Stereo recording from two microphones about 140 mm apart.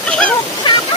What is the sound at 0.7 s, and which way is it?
Waterfall, 35° left (ahead or behind).